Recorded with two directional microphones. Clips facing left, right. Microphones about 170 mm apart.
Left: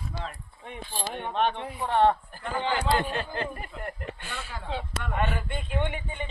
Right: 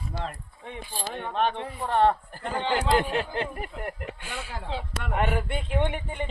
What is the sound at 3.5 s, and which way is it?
Speech, 15° right (ahead or behind).